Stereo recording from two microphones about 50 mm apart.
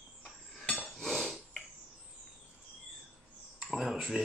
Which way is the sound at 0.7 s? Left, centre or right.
Centre.